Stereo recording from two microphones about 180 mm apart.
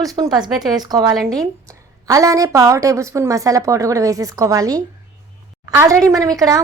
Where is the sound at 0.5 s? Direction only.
Centre (ahead or behind).